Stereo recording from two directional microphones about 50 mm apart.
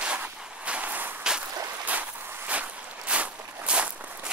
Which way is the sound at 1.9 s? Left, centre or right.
Right.